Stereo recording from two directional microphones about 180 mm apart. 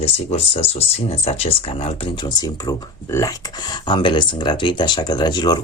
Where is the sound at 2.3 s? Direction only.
20° left (ahead or behind).